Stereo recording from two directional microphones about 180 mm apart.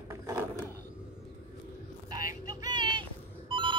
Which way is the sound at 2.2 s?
20° right (ahead or behind).